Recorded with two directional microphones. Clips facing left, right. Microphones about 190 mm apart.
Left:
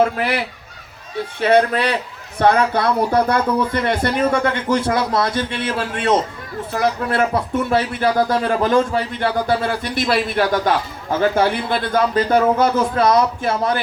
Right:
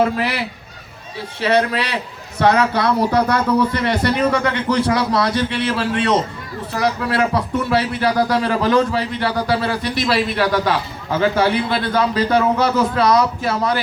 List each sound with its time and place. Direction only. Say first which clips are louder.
0.2 s speech: left 1 dB; 50° left (ahead or behind)